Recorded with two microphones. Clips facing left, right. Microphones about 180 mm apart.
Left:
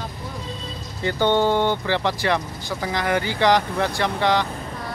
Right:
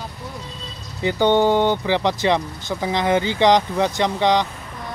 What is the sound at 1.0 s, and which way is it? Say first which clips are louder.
Speech: right 3 dB; 15° right (ahead or behind).